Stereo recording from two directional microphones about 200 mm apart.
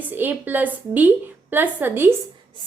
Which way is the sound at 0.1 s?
10° right (ahead or behind).